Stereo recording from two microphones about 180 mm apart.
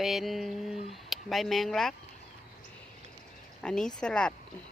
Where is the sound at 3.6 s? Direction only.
5° left (ahead or behind).